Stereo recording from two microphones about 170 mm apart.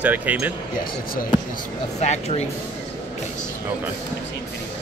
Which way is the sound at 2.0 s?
40° left (ahead or behind).